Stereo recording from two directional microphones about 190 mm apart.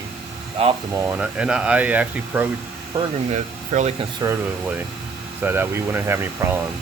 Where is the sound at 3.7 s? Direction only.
40° right (ahead or behind).